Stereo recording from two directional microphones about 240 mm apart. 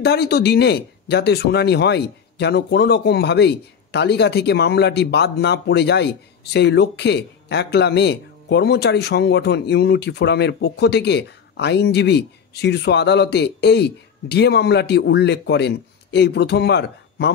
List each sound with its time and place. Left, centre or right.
0.0 s speech: left